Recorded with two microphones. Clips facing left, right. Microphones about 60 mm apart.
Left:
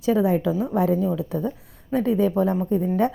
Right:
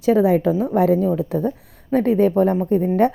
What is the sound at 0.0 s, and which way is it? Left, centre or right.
A woman's voice, right.